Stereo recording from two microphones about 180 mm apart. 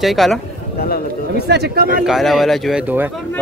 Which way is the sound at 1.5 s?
65° right (ahead or behind).